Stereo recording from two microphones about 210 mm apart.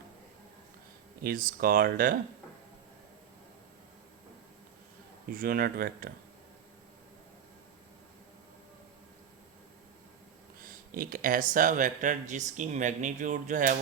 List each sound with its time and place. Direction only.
1.2 s speech: 40° right (ahead or behind)
5.3 s speech: 45° right (ahead or behind)
10.7 s a sound: 45° right (ahead or behind)
11.5 s speech: 40° right (ahead or behind)